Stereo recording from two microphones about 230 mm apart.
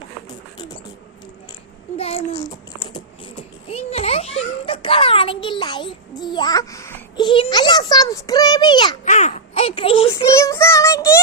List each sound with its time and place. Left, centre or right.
2.0 s child singing: left
2.5 s babbling: centre
3.7 s a sound: left
9.0 s a child's voice: left
10.3 s child singing: centre